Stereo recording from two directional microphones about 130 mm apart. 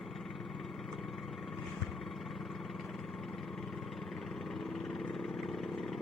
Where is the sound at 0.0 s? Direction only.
Centre (ahead or behind).